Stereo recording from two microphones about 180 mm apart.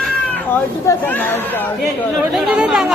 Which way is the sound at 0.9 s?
10° left (ahead or behind).